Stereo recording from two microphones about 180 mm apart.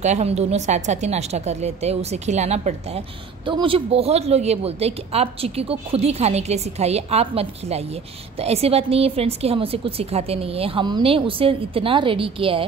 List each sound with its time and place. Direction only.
0.0 s a woman's voice: 40° right (ahead or behind)